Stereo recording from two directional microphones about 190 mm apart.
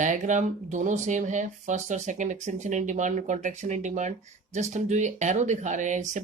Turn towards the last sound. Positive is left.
turn(degrees=-40)  # may be behind; listen again after turning